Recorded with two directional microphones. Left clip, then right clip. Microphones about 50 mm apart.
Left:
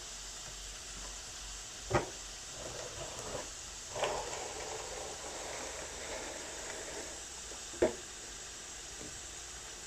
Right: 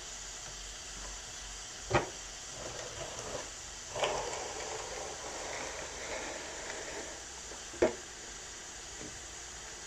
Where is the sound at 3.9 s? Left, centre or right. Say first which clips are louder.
Right 2 dB; centre.